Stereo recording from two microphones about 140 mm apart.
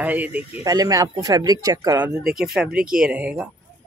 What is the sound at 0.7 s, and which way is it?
Speech, 25° right (ahead or behind).